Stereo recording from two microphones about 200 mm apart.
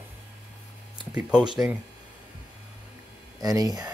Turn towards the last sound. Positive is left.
turn(degrees=-20)  # may be behind; listen again after turning